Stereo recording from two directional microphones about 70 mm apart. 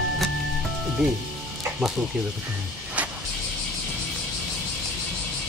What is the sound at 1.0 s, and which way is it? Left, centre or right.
Speech, centre.